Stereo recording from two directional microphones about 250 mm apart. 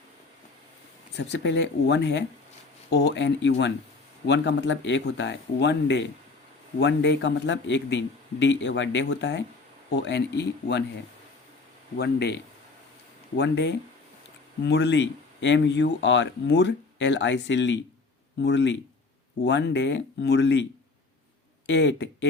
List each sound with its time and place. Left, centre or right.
1.1 s speech: left
11.9 s speech: left
21.7 s speech: left